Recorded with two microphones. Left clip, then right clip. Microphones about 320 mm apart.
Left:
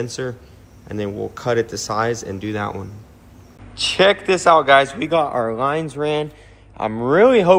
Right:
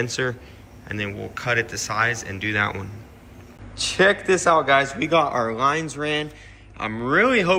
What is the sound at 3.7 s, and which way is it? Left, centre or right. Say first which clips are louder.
A man's voice: left 3 dB; centre.